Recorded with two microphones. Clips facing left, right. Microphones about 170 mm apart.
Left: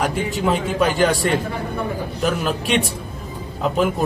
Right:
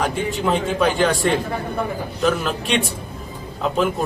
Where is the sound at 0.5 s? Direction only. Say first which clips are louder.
Right 2 dB; 5° left (ahead or behind).